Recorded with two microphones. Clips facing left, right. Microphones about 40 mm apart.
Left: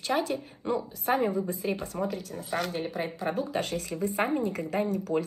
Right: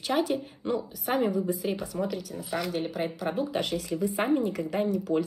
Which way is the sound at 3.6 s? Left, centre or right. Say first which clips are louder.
Right 2 dB; left.